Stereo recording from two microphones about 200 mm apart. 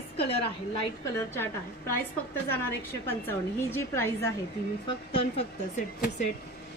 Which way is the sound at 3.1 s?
10° left (ahead or behind).